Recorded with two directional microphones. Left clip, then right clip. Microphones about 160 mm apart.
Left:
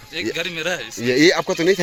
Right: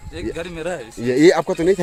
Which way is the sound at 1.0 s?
20° right (ahead or behind).